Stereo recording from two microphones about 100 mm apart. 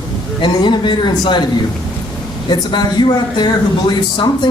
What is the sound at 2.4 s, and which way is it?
Speech, 45° left (ahead or behind).